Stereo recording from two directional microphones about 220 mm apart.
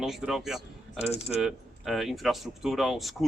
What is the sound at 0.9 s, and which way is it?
Speech, 30° left (ahead or behind).